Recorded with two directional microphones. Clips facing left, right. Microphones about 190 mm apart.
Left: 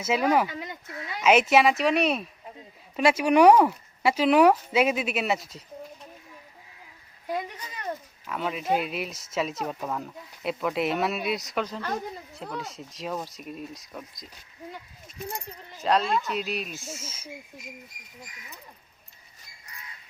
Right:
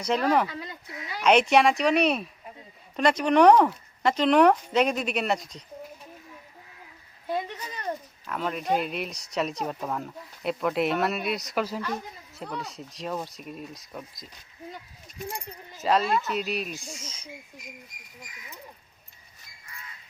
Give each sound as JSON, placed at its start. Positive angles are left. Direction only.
{"t": 0.0, "sound": "speech", "side_deg": 5}
{"t": 0.4, "sound": "speech", "side_deg": 20}
{"t": 1.2, "sound": "speech", "side_deg": 5}
{"t": 8.3, "sound": "speech", "side_deg": 5}
{"t": 15.8, "sound": "speech", "side_deg": 0}